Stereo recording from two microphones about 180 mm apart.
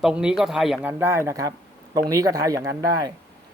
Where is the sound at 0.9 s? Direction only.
15° right (ahead or behind).